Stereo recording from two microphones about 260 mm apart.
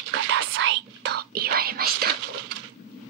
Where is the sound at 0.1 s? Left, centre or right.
Right.